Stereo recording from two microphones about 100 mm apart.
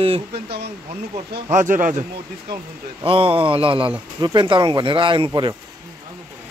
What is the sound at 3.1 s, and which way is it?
Speech, 65° right (ahead or behind).